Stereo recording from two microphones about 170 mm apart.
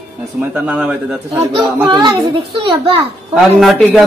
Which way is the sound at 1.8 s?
25° right (ahead or behind).